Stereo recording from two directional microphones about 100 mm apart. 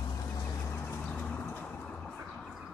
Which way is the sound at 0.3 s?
35° left (ahead or behind).